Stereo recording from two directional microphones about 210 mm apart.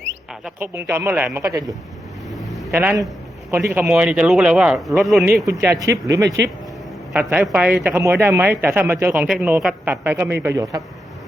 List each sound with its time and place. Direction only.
0.4 s a man's voice: 10° right (ahead or behind)
2.3 s vehicle: centre (ahead or behind)
2.7 s a man's voice: 10° right (ahead or behind)
5.6 s a man's voice: 15° right (ahead or behind)
6.2 s speech: 55° right (ahead or behind)
7.1 s a man's voice: 10° right (ahead or behind)